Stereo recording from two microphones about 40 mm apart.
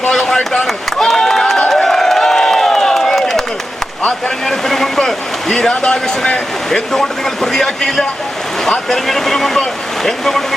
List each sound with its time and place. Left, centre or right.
0.1 s chop: centre
1.0 s a sound: centre
4.4 s speech: centre